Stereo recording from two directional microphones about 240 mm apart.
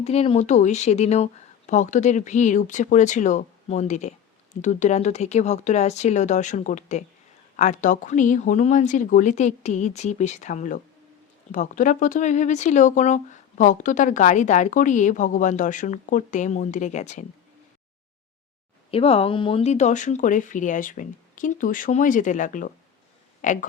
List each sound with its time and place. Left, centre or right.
0.0 s speech: left
18.9 s speech: left